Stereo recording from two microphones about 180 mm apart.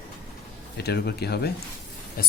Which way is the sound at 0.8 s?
65° left (ahead or behind).